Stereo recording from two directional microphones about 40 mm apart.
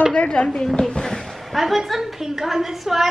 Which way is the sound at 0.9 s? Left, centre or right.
Centre.